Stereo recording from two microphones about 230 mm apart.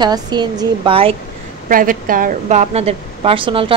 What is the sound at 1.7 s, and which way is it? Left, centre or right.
A woman's voice, right.